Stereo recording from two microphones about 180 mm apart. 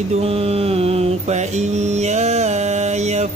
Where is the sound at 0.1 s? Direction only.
35° right (ahead or behind).